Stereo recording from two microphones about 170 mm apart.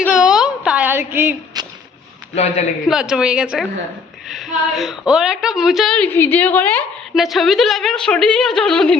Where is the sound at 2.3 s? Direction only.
40° left (ahead or behind).